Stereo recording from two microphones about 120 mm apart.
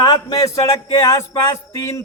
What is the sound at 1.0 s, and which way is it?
A man's voice, 25° left (ahead or behind).